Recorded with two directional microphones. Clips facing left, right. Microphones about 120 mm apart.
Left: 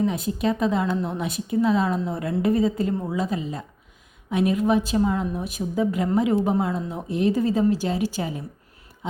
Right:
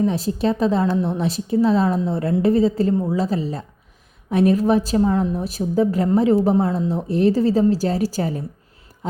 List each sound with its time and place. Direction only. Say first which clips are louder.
0.1 s a woman's voice: right 3 dB; 30° right (ahead or behind)